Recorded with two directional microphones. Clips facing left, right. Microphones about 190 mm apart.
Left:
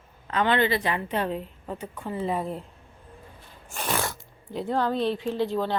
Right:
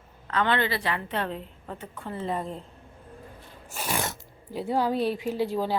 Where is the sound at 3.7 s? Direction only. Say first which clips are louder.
Left 2 dB; 10° right (ahead or behind).